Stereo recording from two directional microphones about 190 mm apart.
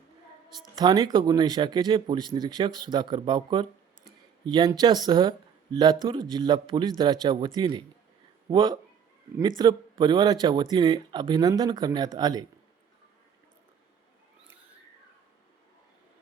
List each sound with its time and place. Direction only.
0.8 s speech: 20° right (ahead or behind)